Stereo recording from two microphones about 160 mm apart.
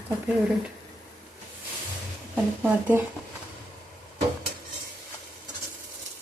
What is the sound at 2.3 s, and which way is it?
Speech, 10° right (ahead or behind).